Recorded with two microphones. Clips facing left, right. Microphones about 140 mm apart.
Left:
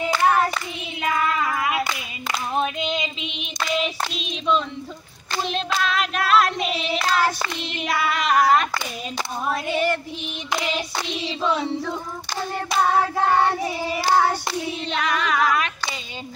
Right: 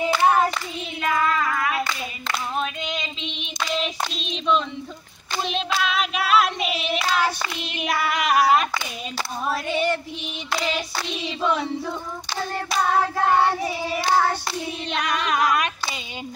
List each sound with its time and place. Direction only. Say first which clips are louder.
0.2 s clapping: even; 15° right (ahead or behind)
1.0 s clapping: even; 20° left (ahead or behind)
2.5 s female singing: left 7 dB; 25° left (ahead or behind)
3.2 s child singing: left 1 dB; centre (ahead or behind)
5.3 s hands: even; 5° right (ahead or behind)
9.5 s female singing: left 1 dB; centre (ahead or behind)
10.5 s clapping: even; 15° left (ahead or behind)
13.9 s clapping: left 1 dB; 5° left (ahead or behind)
14.9 s female singing: even; 20° right (ahead or behind)